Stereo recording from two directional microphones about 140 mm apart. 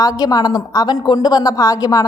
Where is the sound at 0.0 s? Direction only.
25° left (ahead or behind).